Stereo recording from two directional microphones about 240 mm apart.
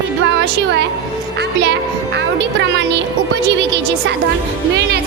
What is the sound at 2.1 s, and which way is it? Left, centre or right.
Speech, right.